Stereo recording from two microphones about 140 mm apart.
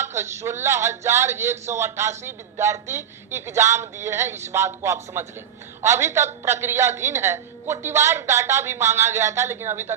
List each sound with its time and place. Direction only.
0.0 s a woman's voice: 20° right (ahead or behind)